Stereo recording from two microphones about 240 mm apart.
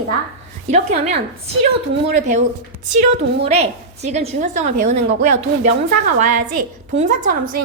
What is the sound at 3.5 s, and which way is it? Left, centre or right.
A woman's voice, right.